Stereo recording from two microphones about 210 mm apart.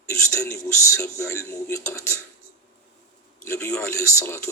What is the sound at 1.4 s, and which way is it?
Speech, 15° left (ahead or behind).